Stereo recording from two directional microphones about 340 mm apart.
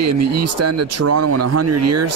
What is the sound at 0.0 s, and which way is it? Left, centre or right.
Speech, right.